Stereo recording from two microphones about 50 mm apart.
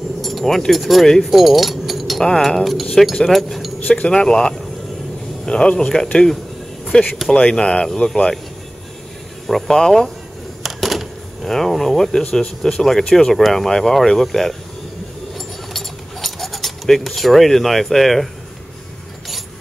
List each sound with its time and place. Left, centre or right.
0.2 s keys jangling: centre
0.7 s speech: centre
3.9 s a man's voice: centre
9.5 s speech: centre
10.6 s a sound: centre
11.4 s speech: centre
15.3 s a sound: centre